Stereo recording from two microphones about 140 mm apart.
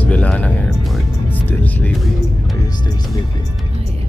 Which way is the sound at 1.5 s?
15° left (ahead or behind).